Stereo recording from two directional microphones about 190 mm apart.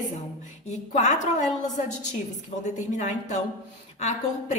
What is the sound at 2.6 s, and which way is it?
Speech, 40° left (ahead or behind).